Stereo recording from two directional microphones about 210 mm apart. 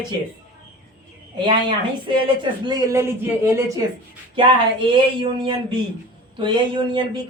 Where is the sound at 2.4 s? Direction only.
20° right (ahead or behind).